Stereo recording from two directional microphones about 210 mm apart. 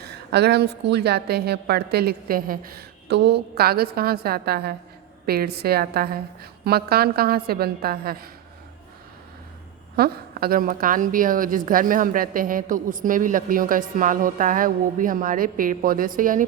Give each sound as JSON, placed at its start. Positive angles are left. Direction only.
{"t": 0.0, "sound": "a woman's voice", "side_deg": -50}
{"t": 9.9, "sound": "a woman's voice", "side_deg": -45}